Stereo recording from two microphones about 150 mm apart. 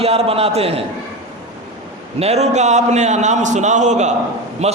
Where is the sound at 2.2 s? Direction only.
45° right (ahead or behind).